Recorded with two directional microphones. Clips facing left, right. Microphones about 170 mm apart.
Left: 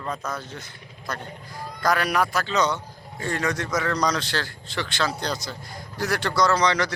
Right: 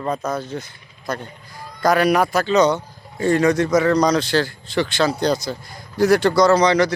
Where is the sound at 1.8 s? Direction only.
10° right (ahead or behind).